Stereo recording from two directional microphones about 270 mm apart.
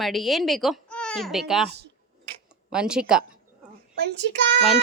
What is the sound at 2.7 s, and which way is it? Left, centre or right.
Speech, centre.